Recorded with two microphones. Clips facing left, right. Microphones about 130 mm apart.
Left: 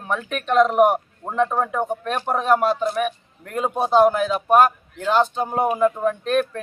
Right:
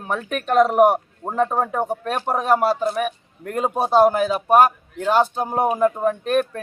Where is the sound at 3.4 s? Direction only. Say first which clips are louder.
Right 1 dB; 40° right (ahead or behind).